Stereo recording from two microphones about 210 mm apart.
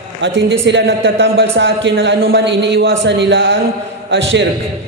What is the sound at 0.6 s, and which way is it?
A man's voice, 60° right (ahead or behind).